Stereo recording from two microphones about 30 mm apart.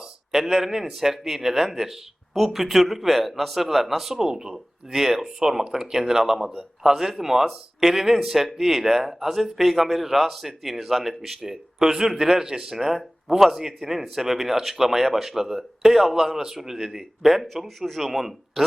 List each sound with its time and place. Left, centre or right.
0.3 s a man's voice: centre
12.7 s speech: centre